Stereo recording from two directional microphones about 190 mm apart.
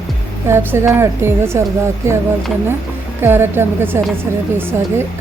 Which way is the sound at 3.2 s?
10° right (ahead or behind).